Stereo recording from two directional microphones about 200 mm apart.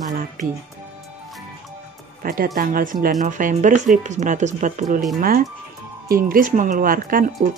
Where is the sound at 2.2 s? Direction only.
45° right (ahead or behind).